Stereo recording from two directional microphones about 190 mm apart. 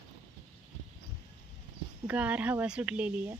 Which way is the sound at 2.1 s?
5° right (ahead or behind).